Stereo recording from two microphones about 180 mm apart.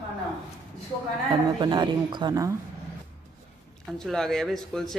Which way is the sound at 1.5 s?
25° right (ahead or behind).